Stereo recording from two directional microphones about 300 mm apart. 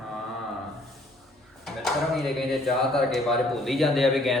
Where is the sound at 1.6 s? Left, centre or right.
Centre.